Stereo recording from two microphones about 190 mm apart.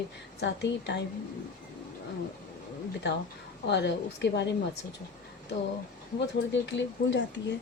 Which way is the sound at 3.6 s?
65° left (ahead or behind).